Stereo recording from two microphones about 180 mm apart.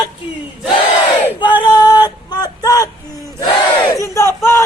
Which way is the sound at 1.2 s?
10° right (ahead or behind).